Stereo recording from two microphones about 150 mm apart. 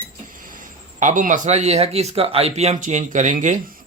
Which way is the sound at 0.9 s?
55° right (ahead or behind).